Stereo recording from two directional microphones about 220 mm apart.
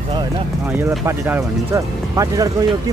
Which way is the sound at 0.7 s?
10° right (ahead or behind).